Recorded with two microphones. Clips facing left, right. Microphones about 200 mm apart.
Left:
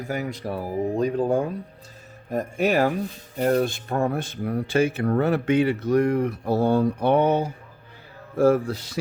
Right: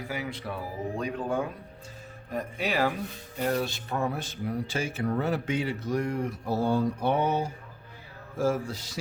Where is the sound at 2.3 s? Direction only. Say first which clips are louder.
Left 8 dB; 45° left (ahead or behind).